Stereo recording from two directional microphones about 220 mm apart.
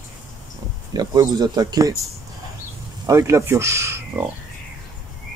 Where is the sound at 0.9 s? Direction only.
20° right (ahead or behind).